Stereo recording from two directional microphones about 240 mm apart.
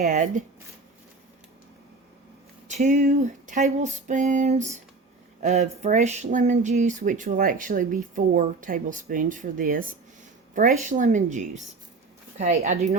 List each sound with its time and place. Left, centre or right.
0.0 s speech: right
2.6 s a woman's voice: right